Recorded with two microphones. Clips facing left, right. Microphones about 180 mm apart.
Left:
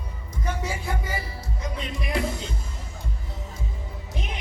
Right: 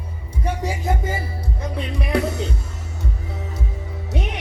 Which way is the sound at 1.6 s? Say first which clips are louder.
Right 4 dB; 60° right (ahead or behind).